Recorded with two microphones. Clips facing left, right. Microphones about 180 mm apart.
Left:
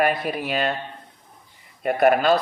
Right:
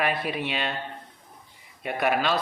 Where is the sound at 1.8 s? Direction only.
50° left (ahead or behind).